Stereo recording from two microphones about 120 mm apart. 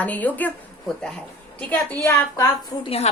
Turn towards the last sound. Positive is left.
turn(degrees=55)  # may be behind; listen again after turning